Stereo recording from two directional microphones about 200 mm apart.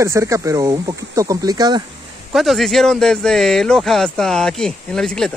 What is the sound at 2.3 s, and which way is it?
Speech, centre (ahead or behind).